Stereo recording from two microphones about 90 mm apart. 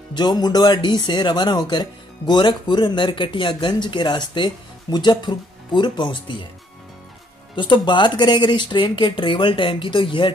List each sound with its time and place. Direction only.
0.1 s speech: 50° left (ahead or behind)
7.5 s speech: 60° left (ahead or behind)